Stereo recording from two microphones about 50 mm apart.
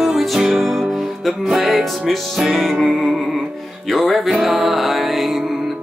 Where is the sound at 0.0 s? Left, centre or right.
Centre.